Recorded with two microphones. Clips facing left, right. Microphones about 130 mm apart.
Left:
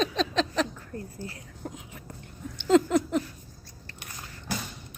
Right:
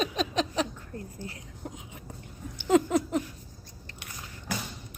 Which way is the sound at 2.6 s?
15° right (ahead or behind).